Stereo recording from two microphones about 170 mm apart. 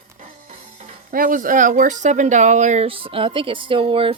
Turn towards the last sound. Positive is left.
turn(degrees=-30)  # may be behind; listen again after turning